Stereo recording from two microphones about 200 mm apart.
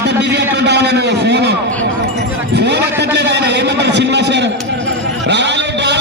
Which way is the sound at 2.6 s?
55° right (ahead or behind).